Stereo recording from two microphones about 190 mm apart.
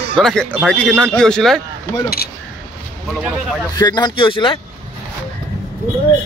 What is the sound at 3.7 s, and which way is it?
Speech, 20° left (ahead or behind).